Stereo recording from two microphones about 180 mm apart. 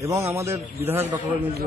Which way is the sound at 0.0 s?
15° right (ahead or behind).